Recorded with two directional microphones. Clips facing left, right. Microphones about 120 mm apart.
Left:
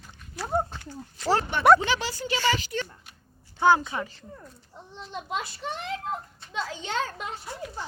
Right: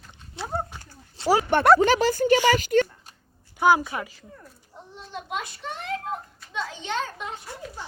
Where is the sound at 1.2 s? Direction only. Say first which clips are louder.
Right 4 dB; 30° right (ahead or behind).